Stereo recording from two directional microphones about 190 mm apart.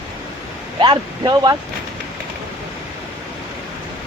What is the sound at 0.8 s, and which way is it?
Speech, 25° right (ahead or behind).